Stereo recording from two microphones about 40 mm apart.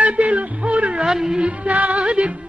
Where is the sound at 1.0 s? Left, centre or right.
Centre.